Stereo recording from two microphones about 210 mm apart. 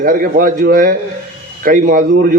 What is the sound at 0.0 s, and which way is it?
A man's voice, 40° right (ahead or behind).